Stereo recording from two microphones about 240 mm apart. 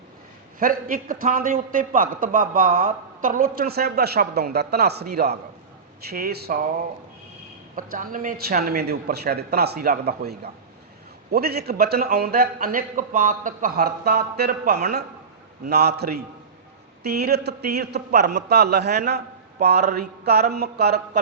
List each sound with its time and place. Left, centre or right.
0.6 s a man's voice: right
7.8 s a man's voice: right